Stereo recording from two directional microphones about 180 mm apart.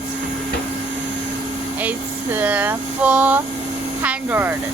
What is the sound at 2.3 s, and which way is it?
Speech, 10° right (ahead or behind).